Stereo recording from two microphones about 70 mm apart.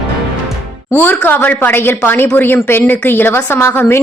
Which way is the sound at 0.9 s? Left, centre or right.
Left.